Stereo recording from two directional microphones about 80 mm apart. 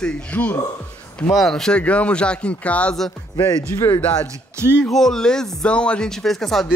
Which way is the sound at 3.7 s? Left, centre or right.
Left.